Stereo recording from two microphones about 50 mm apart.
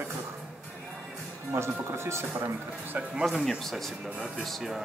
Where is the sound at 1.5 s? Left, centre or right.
Right.